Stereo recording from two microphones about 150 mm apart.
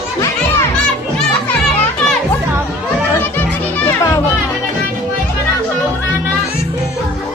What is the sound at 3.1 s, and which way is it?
Children playing, 15° left (ahead or behind).